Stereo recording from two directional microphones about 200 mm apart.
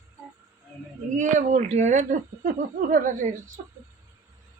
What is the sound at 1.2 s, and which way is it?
Speech, 40° right (ahead or behind).